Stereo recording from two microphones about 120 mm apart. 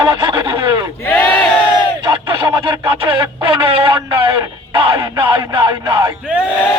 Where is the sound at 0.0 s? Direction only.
45° right (ahead or behind).